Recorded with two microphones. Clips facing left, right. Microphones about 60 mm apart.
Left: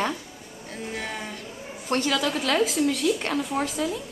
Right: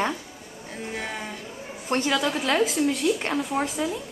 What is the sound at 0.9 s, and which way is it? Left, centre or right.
Speech, centre.